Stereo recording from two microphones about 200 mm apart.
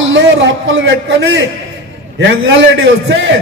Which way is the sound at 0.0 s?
70° right (ahead or behind).